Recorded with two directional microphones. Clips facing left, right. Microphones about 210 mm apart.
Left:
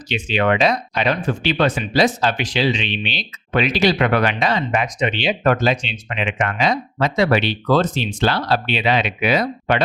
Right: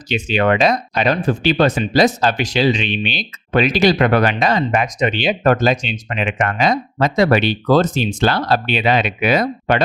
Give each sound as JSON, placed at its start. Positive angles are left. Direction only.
{"t": 0.1, "sound": "speech", "side_deg": -45}